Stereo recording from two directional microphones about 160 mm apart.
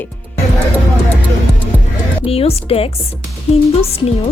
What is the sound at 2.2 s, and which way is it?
Speech, 35° left (ahead or behind).